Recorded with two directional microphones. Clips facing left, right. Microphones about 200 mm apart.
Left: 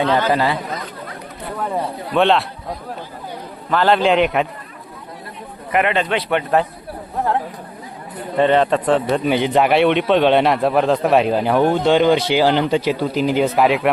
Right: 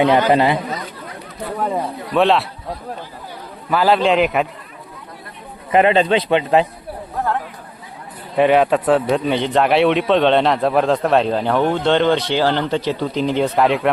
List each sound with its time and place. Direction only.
0.0 s a man's voice: 15° right (ahead or behind)
2.1 s a man's voice: centre (ahead or behind)
3.7 s a man's voice: 5° right (ahead or behind)
5.7 s a man's voice: 30° right (ahead or behind)
8.4 s a man's voice: 10° right (ahead or behind)